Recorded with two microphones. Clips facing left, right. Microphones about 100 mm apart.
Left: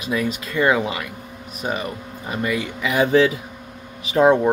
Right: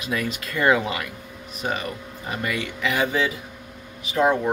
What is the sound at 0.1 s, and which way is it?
Speech, 5° left (ahead or behind).